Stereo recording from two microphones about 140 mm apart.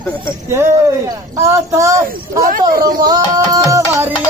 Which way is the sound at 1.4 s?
20° right (ahead or behind).